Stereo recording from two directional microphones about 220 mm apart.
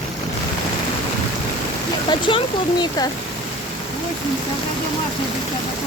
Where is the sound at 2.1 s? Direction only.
20° left (ahead or behind).